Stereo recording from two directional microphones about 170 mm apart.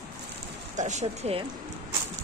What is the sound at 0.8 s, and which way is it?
Speech, 45° right (ahead or behind).